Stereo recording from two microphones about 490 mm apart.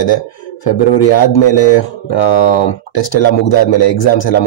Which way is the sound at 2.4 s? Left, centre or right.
Left.